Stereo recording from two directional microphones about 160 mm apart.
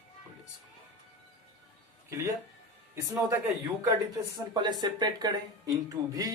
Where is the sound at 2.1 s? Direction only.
15° right (ahead or behind).